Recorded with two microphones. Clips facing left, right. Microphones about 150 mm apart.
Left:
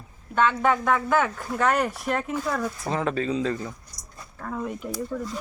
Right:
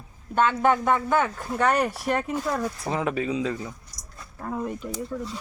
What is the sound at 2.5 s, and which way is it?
Speech, 10° right (ahead or behind).